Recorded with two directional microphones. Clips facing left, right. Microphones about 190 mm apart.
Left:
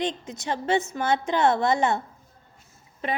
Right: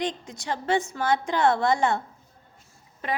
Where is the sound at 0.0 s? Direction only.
20° left (ahead or behind).